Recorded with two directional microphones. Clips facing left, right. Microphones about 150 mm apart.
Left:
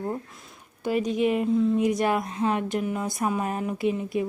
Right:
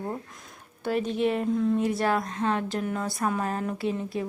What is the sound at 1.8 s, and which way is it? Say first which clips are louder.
Speech: left 2 dB; 15° left (ahead or behind).